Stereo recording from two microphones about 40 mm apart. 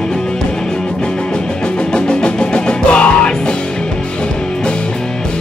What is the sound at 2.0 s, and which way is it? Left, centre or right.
Music, left.